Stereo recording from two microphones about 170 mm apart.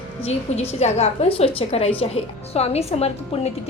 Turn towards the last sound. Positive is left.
turn(degrees=35)  # may be behind; listen again after turning